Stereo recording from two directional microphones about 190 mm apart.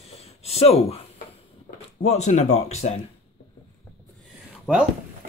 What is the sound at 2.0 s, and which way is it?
Speech, 35° left (ahead or behind).